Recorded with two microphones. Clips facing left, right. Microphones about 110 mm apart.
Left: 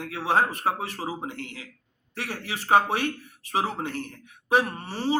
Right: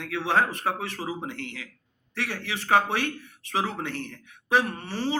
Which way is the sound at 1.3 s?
40° left (ahead or behind).